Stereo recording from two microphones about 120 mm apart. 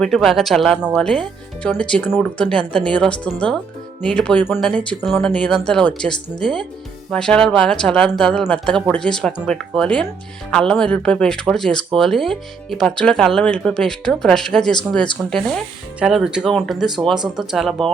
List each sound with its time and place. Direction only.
0.0 s speech: 5° left (ahead or behind)
2.0 s speech: 5° right (ahead or behind)
2.5 s speech: 5° left (ahead or behind)